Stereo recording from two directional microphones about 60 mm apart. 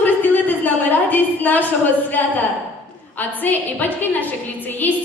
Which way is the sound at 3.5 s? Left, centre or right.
Left.